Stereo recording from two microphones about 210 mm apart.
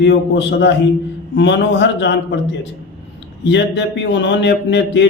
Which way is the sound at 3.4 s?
60° left (ahead or behind).